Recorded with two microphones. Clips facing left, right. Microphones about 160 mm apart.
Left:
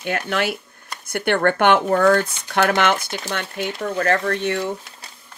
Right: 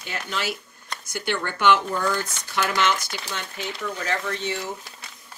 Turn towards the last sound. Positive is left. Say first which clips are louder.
# left 7 dB
turn(degrees=60)  # may be behind; listen again after turning